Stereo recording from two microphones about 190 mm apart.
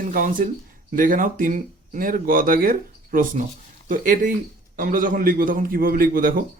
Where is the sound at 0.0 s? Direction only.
45° right (ahead or behind).